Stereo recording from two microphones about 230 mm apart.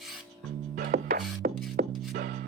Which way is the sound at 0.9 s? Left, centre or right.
Right.